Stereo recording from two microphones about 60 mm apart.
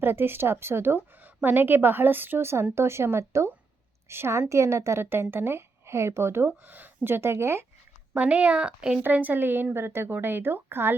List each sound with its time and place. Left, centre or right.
0.0 s a woman's voice: right
5.0 s speech: right
6.6 s a woman's voice: right
8.2 s speech: right
9.0 s a woman's voice: right